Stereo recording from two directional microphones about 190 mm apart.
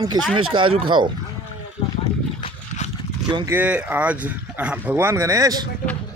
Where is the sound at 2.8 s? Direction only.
35° left (ahead or behind).